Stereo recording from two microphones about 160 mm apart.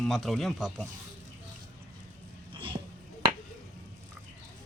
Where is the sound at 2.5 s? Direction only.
30° right (ahead or behind).